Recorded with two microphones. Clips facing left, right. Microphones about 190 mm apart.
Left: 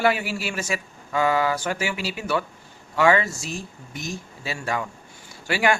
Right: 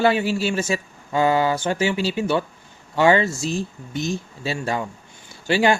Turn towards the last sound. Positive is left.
turn(degrees=-25)  # may be behind; listen again after turning